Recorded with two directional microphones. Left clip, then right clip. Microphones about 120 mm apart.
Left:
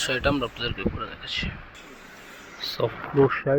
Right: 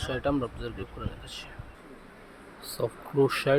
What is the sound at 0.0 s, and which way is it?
Speech, 15° left (ahead or behind).